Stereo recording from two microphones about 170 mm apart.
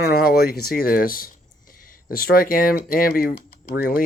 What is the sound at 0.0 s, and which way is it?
Speech, 65° left (ahead or behind).